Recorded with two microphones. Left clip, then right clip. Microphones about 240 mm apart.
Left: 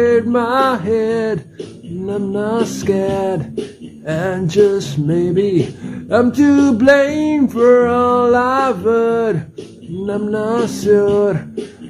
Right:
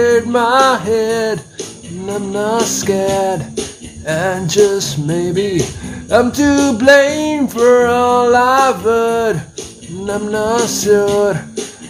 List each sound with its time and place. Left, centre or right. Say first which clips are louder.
0.0 s music: right 2 dB; centre